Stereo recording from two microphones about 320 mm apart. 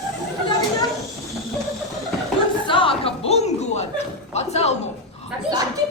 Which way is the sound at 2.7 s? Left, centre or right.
Centre.